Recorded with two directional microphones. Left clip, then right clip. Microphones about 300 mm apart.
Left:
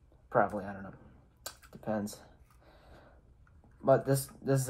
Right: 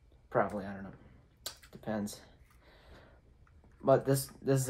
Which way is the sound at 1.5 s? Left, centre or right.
Centre.